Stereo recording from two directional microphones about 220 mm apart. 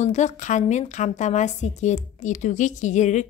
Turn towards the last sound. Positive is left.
turn(degrees=35)  # may be behind; listen again after turning